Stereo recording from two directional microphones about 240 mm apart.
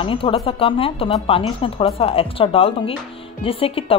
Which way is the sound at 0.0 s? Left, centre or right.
Left.